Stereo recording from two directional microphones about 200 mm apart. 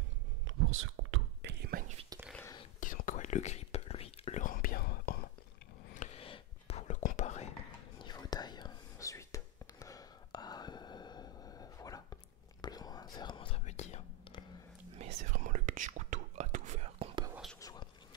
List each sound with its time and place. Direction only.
0.5 s whispering: 80° right; by 2.0 s 45° right (ahead or behind)
2.4 s whispering: 20° left (ahead or behind)
2.8 s whispering: 40° left (ahead or behind)
5.9 s whispering: 30° left (ahead or behind)
8.0 s whispering: 20° left (ahead or behind)
15.0 s whispering: 35° right (ahead or behind)
17.6 s whispering: 20° left (ahead or behind)